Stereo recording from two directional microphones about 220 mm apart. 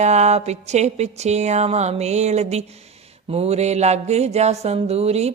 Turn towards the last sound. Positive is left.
turn(degrees=-30)  # may be behind; listen again after turning